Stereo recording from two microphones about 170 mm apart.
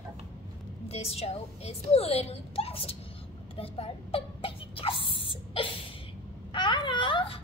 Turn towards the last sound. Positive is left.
turn(degrees=30)  # may be behind; listen again after turning